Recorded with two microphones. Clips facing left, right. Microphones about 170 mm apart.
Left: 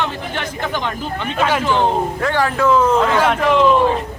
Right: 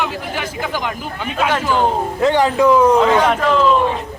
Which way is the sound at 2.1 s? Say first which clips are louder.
Right 4 dB; 20° right (ahead or behind).